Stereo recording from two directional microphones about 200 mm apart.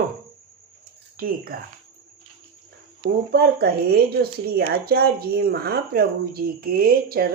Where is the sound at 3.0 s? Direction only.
55° right (ahead or behind).